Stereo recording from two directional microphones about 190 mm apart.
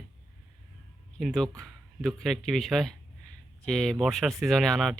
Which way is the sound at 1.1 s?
Centre (ahead or behind).